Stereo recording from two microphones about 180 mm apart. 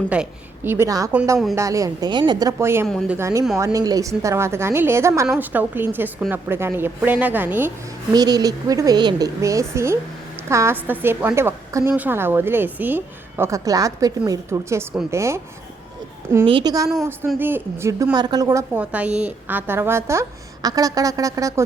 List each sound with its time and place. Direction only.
0.1 s a woman's voice: 10° right (ahead or behind)
2.8 s speech: centre (ahead or behind)
3.2 s a woman's voice: 15° right (ahead or behind)
8.1 s a woman's voice: 20° right (ahead or behind)
16.5 s a woman's voice: 25° right (ahead or behind)
17.2 s a woman's voice: 10° right (ahead or behind)